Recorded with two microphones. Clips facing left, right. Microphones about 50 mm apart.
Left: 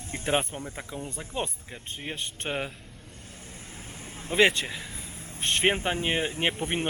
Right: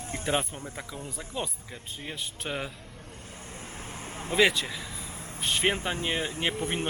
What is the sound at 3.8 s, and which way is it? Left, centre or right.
Vehicle, centre.